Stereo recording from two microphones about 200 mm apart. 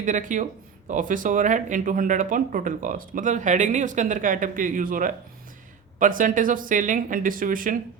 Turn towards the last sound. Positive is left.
turn(degrees=-45)  # may be behind; listen again after turning